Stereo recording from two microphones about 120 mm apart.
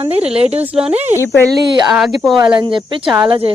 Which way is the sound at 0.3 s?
60° right (ahead or behind).